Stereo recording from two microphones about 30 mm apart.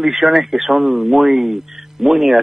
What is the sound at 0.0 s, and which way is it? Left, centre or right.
A man's voice, centre.